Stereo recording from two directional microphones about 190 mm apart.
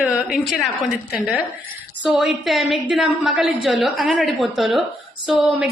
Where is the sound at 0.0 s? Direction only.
5° right (ahead or behind).